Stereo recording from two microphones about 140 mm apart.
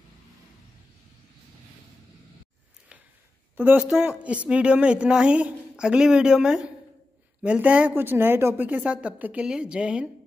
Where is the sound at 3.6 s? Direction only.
10° right (ahead or behind).